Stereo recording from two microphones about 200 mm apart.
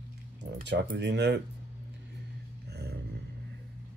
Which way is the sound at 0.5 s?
60° right (ahead or behind).